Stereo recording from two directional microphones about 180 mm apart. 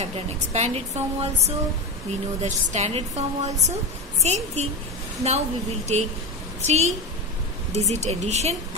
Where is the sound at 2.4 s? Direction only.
40° right (ahead or behind).